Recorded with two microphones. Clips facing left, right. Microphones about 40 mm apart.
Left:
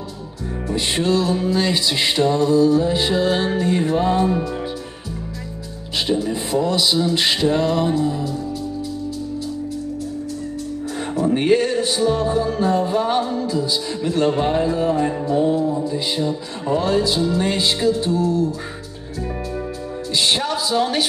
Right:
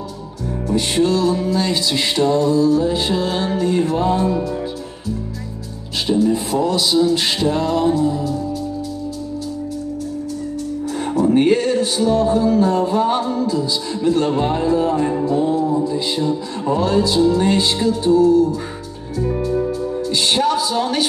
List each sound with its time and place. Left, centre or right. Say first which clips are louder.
0.7 s music: right 3 dB; centre
6.0 s music: right 6 dB; centre
11.0 s music: right 4 dB; centre
19.2 s music: right 8 dB; centre